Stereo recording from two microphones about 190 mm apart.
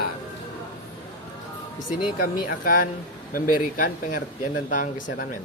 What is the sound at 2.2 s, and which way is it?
Speech, 45° left (ahead or behind).